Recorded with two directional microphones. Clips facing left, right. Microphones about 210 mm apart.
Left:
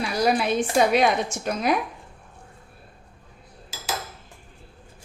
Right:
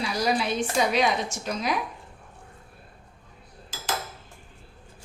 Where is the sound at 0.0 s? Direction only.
55° left (ahead or behind).